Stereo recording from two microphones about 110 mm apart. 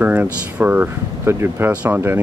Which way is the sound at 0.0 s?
15° right (ahead or behind).